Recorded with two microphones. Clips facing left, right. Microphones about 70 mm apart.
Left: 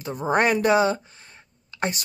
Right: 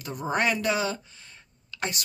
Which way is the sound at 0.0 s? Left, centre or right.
Left.